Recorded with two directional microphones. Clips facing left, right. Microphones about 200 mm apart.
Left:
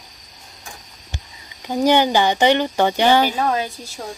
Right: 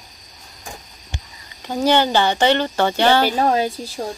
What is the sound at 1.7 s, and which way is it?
Speech, 15° left (ahead or behind).